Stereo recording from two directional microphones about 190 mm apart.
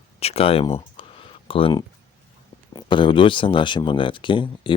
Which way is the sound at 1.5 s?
30° left (ahead or behind).